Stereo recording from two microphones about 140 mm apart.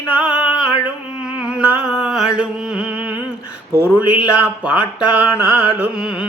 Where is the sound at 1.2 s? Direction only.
5° right (ahead or behind).